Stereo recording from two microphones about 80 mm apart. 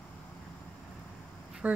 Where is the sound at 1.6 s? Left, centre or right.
Centre.